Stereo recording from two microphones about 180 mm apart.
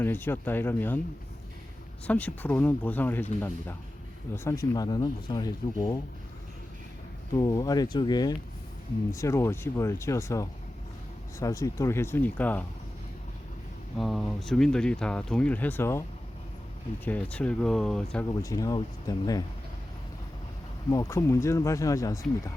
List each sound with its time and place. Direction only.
0.0 s speech: 10° left (ahead or behind)
2.0 s speech: 10° left (ahead or behind)
4.4 s speech: 20° left (ahead or behind)
7.3 s speech: 20° left (ahead or behind)
14.0 s speech: centre (ahead or behind)
17.1 s speech: 5° left (ahead or behind)
18.4 s speech: 20° left (ahead or behind)
20.9 s speech: 15° left (ahead or behind)